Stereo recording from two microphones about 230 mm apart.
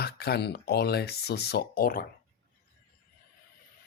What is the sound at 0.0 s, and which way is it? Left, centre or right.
Speech, left.